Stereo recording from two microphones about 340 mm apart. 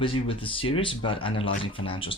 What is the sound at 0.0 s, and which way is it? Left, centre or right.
Speech, centre.